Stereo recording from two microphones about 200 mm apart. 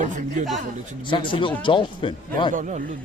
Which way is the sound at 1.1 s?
25° left (ahead or behind).